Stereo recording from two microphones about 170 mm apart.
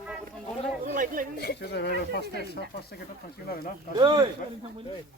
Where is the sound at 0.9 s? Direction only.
55° right (ahead or behind).